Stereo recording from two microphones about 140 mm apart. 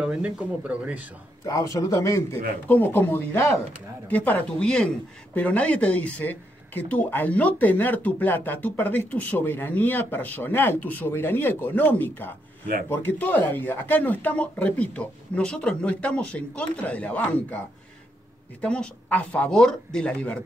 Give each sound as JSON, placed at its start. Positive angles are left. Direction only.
{"t": 0.0, "sound": "speech", "side_deg": -10}
{"t": 1.4, "sound": "a man's voice", "side_deg": 25}
{"t": 18.6, "sound": "speech", "side_deg": 10}